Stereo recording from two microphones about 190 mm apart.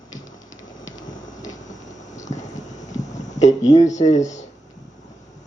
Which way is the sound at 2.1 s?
40° left (ahead or behind).